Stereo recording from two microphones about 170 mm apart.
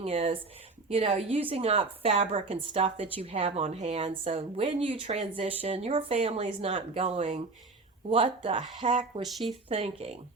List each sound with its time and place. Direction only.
0.0 s a woman's voice: 35° right (ahead or behind)
9.2 s speech: centre (ahead or behind)
9.5 s a woman's voice: 35° right (ahead or behind)